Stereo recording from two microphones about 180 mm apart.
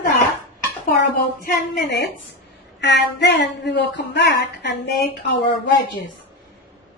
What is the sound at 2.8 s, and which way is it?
A woman's voice, 70° left (ahead or behind).